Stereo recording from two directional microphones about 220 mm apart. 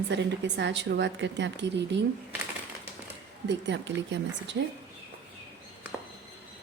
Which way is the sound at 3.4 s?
55° right (ahead or behind).